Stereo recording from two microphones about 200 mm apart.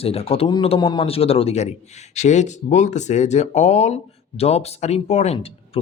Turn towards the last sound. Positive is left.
turn(degrees=30)  # may be behind; listen again after turning